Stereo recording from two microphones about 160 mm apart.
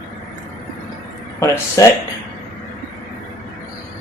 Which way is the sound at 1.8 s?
20° left (ahead or behind).